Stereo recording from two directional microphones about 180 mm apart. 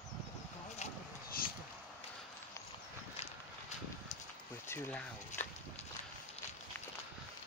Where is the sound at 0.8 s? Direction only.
40° left (ahead or behind).